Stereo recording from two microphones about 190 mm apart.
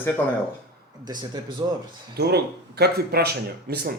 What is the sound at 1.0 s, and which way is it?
Speech, 20° right (ahead or behind).